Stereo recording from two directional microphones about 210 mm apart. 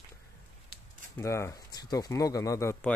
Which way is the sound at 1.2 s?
15° left (ahead or behind).